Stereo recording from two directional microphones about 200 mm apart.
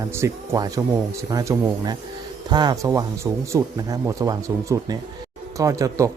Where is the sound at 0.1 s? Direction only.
15° right (ahead or behind).